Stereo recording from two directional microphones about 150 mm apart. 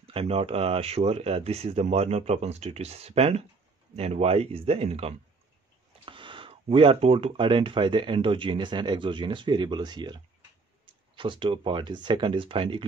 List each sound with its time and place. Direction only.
0.0 s speech: 40° right (ahead or behind)